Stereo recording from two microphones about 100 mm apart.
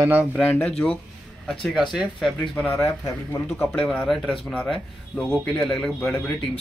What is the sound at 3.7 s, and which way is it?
Speech, 15° left (ahead or behind).